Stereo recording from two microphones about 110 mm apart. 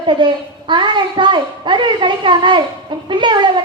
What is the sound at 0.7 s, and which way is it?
A woman's voice, 45° right (ahead or behind).